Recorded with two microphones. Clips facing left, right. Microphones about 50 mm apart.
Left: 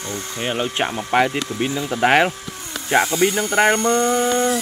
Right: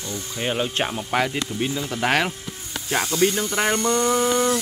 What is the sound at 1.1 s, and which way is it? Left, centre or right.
Speech, centre.